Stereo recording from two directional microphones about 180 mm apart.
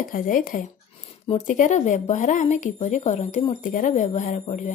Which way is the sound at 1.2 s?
40° left (ahead or behind).